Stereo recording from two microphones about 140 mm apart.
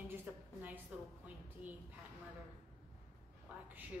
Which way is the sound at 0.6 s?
10° right (ahead or behind).